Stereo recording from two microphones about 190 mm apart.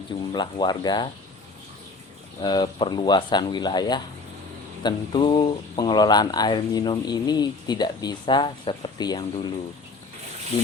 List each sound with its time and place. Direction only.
0.3 s speech: 20° left (ahead or behind)
2.4 s speech: 20° left (ahead or behind)